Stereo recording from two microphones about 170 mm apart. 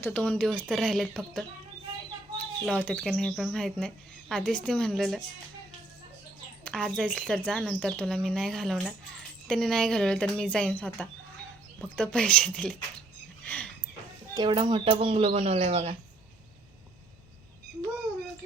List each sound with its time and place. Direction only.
0.0 s speech: 5° left (ahead or behind)
2.6 s speech: 5° left (ahead or behind)
6.7 s speech: 5° left (ahead or behind)
13.4 s a sound: 10° left (ahead or behind)
14.3 s speech: 30° right (ahead or behind)